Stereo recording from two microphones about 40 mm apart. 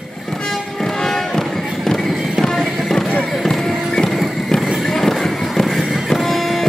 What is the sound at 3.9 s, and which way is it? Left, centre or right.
Clip-clop, centre.